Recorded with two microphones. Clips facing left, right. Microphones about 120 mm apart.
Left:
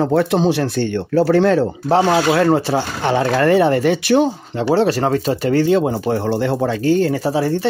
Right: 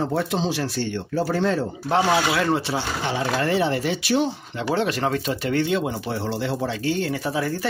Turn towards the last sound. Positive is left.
turn(degrees=30)  # may be behind; listen again after turning